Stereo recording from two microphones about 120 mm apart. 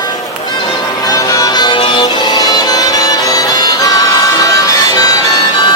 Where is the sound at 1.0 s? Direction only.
30° left (ahead or behind).